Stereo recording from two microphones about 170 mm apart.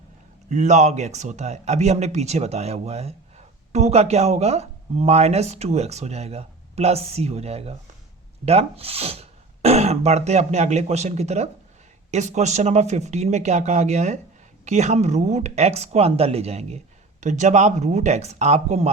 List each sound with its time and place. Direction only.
0.5 s speech: 45° right (ahead or behind)